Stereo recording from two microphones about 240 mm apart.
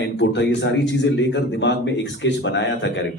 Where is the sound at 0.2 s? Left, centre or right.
Left.